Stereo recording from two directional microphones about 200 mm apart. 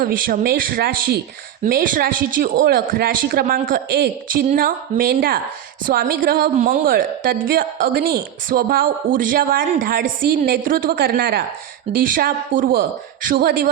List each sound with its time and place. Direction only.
0.0 s a woman's voice: 45° right (ahead or behind)